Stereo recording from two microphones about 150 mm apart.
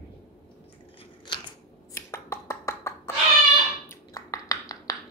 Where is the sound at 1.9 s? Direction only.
20° left (ahead or behind).